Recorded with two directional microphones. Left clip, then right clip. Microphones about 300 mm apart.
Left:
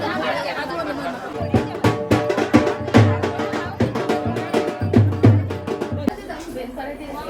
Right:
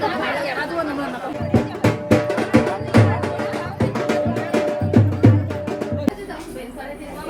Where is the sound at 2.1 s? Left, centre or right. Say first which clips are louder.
Right 1 dB; left.